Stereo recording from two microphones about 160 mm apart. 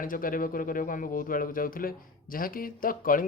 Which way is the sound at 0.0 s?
60° left (ahead or behind).